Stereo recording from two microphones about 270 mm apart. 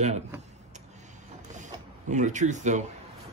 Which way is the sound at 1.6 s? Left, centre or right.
Right.